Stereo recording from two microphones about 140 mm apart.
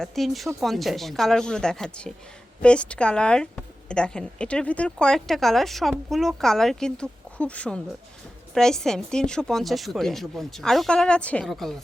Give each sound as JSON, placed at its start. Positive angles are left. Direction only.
{"t": 0.0, "sound": "a woman's voice", "side_deg": 0}